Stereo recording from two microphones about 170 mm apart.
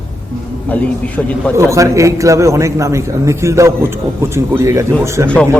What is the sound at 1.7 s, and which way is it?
A man's voice, 20° right (ahead or behind).